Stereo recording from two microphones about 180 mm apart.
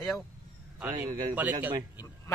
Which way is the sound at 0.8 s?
15° right (ahead or behind).